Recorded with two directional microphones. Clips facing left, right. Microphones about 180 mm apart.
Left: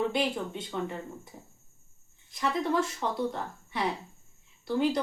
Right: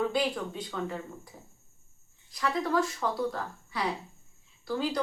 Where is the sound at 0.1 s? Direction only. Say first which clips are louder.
Even; 25° left (ahead or behind).